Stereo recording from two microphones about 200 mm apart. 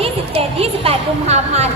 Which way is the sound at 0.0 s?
30° right (ahead or behind).